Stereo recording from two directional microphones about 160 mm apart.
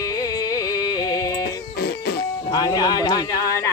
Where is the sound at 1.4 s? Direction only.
80° left.